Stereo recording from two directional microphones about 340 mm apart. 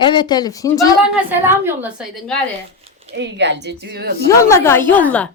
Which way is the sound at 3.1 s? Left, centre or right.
Right.